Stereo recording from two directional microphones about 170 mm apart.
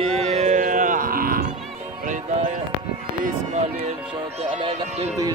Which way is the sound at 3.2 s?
45° right (ahead or behind).